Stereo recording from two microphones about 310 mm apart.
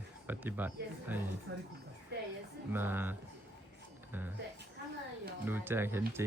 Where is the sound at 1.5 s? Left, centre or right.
Right.